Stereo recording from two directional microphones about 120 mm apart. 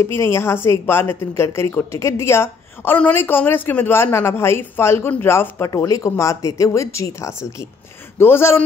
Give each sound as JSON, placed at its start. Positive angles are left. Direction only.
{"t": 0.0, "sound": "a woman's voice", "side_deg": 20}